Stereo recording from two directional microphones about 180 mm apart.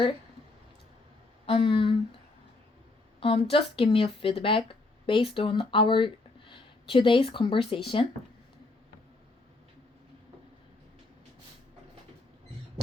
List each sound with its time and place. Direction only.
1.5 s speech: 30° left (ahead or behind)
3.2 s speech: 30° left (ahead or behind)